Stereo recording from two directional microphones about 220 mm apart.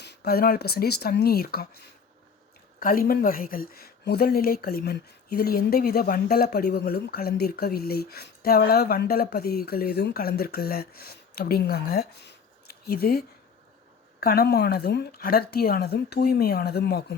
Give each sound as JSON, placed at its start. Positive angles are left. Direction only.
{"t": 0.0, "sound": "speech", "side_deg": 45}
{"t": 2.8, "sound": "speech", "side_deg": 40}